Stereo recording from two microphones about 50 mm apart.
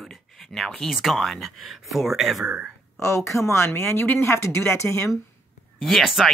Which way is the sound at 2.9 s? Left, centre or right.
Left.